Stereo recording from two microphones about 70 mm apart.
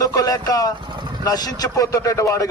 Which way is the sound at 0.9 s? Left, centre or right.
Right.